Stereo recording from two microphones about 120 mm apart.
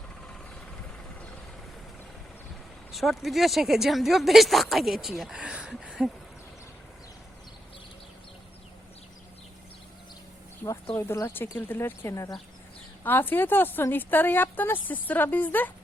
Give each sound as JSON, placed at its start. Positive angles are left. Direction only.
{"t": 2.9, "sound": "speech", "side_deg": 0}
{"t": 10.9, "sound": "speech", "side_deg": 25}
{"t": 13.0, "sound": "a woman's voice", "side_deg": 15}